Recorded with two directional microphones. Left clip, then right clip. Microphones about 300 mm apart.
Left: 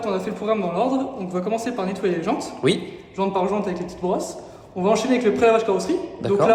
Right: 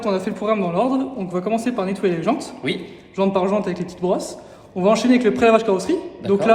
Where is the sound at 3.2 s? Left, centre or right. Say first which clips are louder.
Right 3 dB; right.